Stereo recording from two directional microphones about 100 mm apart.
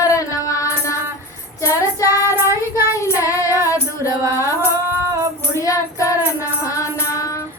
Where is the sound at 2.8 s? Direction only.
30° left (ahead or behind).